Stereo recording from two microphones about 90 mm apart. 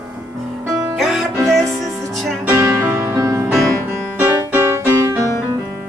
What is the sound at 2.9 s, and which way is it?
Music, 30° right (ahead or behind).